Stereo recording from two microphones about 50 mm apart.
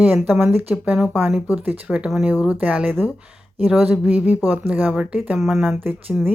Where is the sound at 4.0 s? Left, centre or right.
Right.